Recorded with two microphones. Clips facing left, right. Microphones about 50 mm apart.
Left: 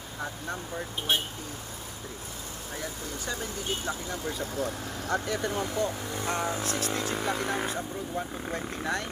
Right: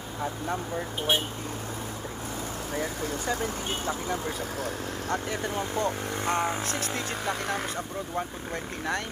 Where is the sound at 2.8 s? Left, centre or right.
Right.